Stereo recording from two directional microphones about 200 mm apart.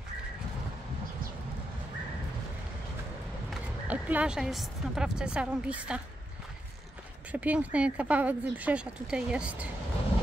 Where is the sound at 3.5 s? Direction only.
5° right (ahead or behind).